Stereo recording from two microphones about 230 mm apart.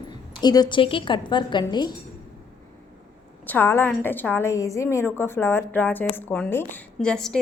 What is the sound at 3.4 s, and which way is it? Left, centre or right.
A woman's voice, centre.